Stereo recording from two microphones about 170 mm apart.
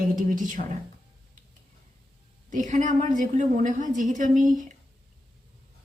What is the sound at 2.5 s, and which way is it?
A woman's voice, 50° right (ahead or behind).